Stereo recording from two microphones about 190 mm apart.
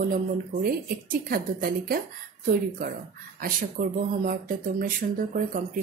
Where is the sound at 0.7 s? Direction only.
50° right (ahead or behind).